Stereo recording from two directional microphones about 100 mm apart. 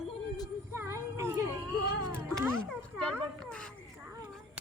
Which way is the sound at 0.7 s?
25° right (ahead or behind).